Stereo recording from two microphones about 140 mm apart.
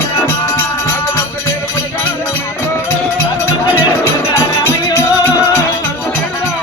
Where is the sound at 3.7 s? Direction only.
20° left (ahead or behind).